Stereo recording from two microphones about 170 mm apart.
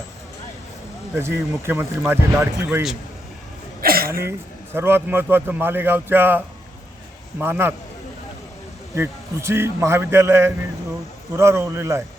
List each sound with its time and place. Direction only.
1.1 s a man's voice: 15° right (ahead or behind)
3.8 s a sound: 60° right (ahead or behind)
4.1 s a man's voice: 15° right (ahead or behind)
9.0 s a man's voice: 15° right (ahead or behind)